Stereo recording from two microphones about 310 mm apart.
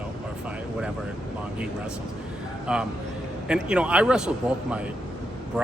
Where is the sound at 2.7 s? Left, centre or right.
Centre.